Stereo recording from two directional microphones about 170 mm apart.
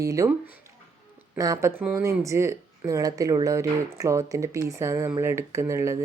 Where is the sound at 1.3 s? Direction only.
20° right (ahead or behind).